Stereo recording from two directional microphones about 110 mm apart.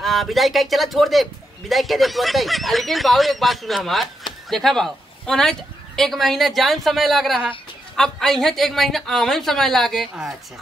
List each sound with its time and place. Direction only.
0.0 s a man's voice: centre (ahead or behind)